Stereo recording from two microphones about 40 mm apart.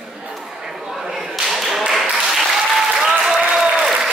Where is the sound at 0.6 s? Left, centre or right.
Centre.